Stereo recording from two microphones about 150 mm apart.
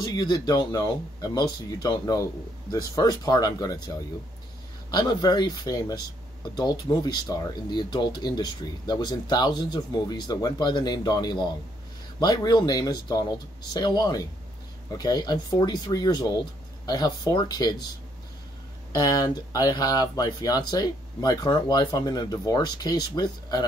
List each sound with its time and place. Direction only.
0.0 s speech: 30° left (ahead or behind)
4.9 s speech: 30° left (ahead or behind)
18.9 s speech: 25° left (ahead or behind)